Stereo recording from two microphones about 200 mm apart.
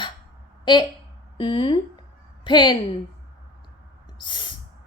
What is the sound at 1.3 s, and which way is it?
A woman's voice, 25° left (ahead or behind).